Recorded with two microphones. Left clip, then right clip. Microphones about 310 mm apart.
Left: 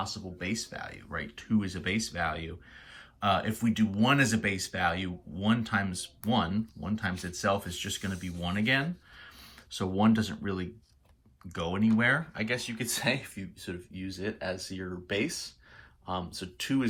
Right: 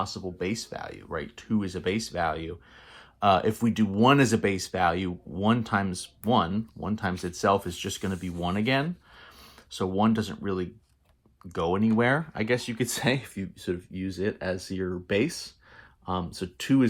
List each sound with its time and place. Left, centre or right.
0.0 s speech: centre